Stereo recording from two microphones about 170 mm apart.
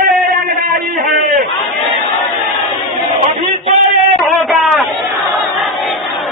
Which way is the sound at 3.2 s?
35° right (ahead or behind).